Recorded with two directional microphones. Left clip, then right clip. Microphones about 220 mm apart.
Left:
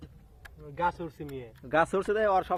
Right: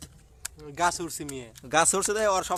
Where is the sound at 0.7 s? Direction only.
30° right (ahead or behind).